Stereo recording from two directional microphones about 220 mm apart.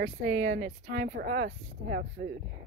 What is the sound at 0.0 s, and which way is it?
Speech, 40° right (ahead or behind).